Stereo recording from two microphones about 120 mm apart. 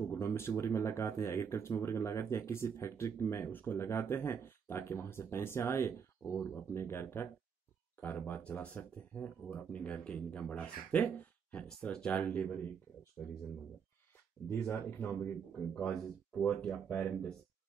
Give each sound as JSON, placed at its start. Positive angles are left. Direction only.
{"t": 0.1, "sound": "speech", "side_deg": 20}
{"t": 14.5, "sound": "speech", "side_deg": 15}
{"t": 16.9, "sound": "speech", "side_deg": 15}